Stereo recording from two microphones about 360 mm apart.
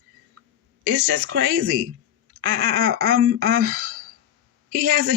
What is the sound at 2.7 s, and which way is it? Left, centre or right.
Speech, right.